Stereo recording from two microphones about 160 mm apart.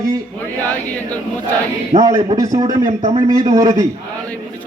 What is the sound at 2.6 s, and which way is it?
Speech, 50° right (ahead or behind).